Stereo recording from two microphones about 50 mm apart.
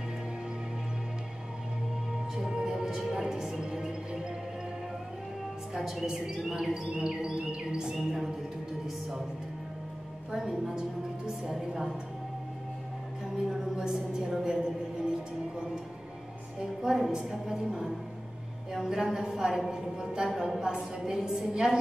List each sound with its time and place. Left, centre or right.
2.3 s music: centre
5.8 s a woman's voice: centre
6.0 s a woman's voice: centre
10.3 s a woman's voice: centre
13.5 s a woman's voice: centre
16.5 s a woman's voice: centre